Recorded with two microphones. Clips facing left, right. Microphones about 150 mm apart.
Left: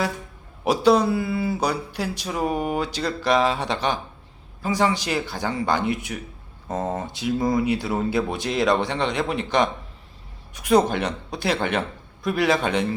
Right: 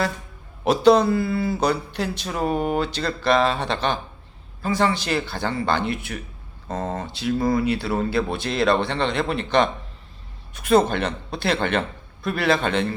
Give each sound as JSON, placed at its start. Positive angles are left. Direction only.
{"t": 0.6, "sound": "a man's voice", "side_deg": 10}